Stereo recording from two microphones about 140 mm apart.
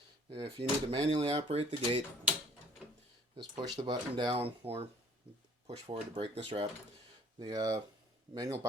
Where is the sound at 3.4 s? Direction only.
30° right (ahead or behind); by 6.7 s 50° right (ahead or behind).